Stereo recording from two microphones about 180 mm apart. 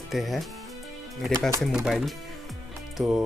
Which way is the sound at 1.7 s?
Centre (ahead or behind).